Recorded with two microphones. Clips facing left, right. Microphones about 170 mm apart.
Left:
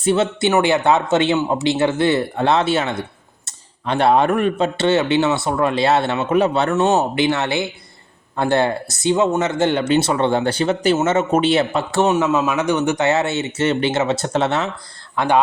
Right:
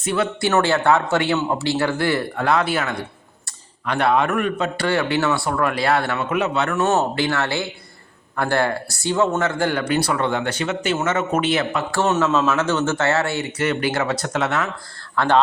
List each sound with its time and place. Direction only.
0.0 s speech: 25° left (ahead or behind)
15.1 s speech: 15° left (ahead or behind)